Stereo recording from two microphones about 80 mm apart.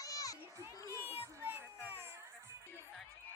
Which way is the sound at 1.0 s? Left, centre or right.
Right.